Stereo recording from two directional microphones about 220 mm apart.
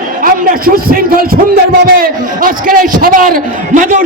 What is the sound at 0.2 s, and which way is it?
A man's voice, 40° right (ahead or behind).